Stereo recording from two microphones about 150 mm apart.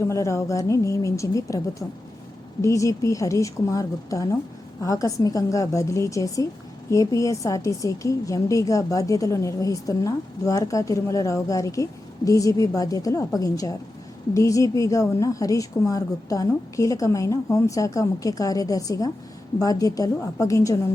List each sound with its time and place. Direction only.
0.1 s a woman's voice: 20° left (ahead or behind)